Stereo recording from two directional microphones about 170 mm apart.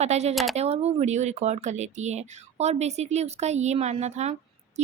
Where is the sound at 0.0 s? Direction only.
40° right (ahead or behind).